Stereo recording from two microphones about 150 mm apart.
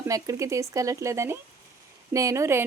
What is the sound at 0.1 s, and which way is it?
Speech, 20° right (ahead or behind).